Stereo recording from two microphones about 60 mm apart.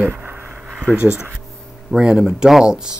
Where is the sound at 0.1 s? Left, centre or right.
Right.